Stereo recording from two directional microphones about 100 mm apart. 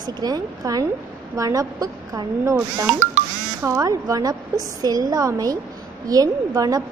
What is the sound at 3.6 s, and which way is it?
A woman's voice, 30° right (ahead or behind).